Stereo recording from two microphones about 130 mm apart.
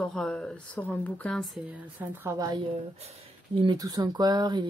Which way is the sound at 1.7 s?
15° right (ahead or behind).